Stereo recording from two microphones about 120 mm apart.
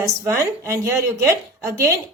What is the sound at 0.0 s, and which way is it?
A woman's voice, 20° right (ahead or behind).